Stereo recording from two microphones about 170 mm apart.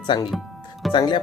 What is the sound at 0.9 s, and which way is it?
Speech, 25° left (ahead or behind).